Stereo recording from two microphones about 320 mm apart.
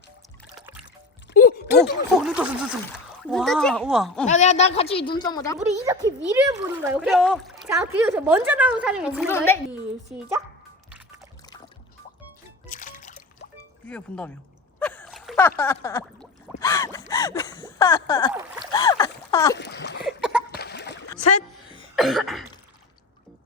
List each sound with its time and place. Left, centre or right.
1.3 s music: left
1.6 s speech: centre
4.3 s a woman's voice: left
5.5 s a woman's voice: centre
12.6 s music: left
13.8 s speech: centre
14.8 s a sound: centre
18.7 s splash: centre
19.5 s splash: left
20.1 s a sound: centre
20.5 s a sound: left
21.9 s cough: centre